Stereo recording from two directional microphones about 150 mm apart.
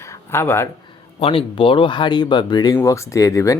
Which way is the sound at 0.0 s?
15° left (ahead or behind).